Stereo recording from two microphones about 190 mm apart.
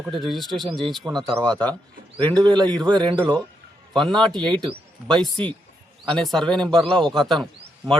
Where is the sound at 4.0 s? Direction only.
Centre (ahead or behind).